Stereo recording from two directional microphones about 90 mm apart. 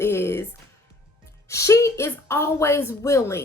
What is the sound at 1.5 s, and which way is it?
A woman's voice, 35° left (ahead or behind).